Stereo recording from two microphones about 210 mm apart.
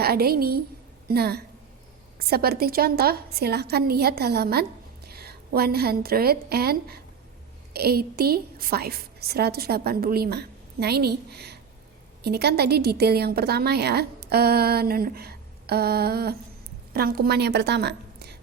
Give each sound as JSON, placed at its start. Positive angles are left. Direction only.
{"t": 0.0, "sound": "a woman's voice", "side_deg": -45}